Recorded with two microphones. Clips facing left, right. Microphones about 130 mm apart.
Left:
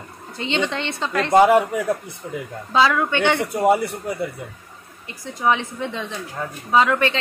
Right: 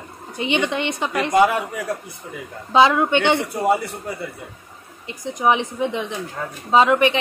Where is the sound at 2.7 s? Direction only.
20° right (ahead or behind).